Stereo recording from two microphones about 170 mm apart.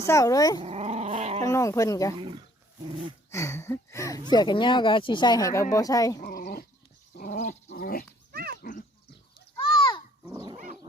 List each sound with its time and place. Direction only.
0.0 s speech: 20° left (ahead or behind)
0.6 s dog: 40° right (ahead or behind)
1.5 s speech: 20° left (ahead or behind)
2.1 s speech: 30° right (ahead or behind)
3.3 s a sound: 15° left (ahead or behind)
4.3 s speech: 25° left (ahead or behind)
6.1 s dog: 55° left (ahead or behind)
7.2 s dog: 45° left (ahead or behind)
7.7 s dog: 60° left (ahead or behind)
8.3 s a sound: 65° right (ahead or behind)
9.6 s a sound: 30° left (ahead or behind)
10.3 s dog: 25° right (ahead or behind)